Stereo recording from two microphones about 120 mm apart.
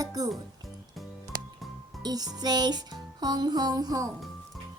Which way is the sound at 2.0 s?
35° right (ahead or behind).